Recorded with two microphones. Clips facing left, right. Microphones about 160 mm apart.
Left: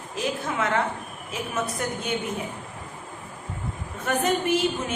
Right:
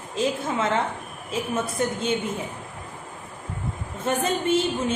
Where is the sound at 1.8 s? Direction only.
25° right (ahead or behind).